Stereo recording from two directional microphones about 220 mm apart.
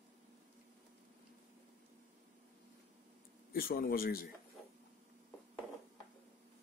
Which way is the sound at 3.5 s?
40° left (ahead or behind).